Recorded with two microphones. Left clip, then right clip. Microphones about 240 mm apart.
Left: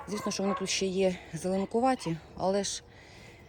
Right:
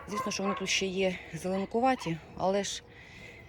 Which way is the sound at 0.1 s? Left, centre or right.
Centre.